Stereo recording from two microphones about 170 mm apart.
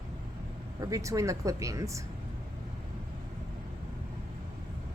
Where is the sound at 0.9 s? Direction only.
20° right (ahead or behind).